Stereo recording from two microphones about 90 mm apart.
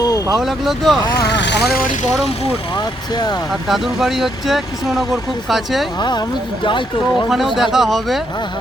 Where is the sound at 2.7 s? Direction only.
50° left (ahead or behind).